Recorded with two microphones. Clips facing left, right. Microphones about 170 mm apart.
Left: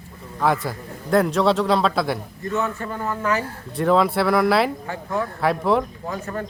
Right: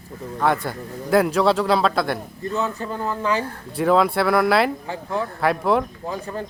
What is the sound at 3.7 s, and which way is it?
Speech, centre (ahead or behind).